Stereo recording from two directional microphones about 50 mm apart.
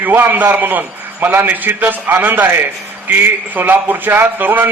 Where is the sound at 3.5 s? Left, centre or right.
Right.